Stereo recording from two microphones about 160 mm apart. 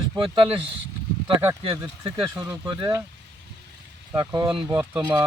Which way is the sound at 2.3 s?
20° right (ahead or behind).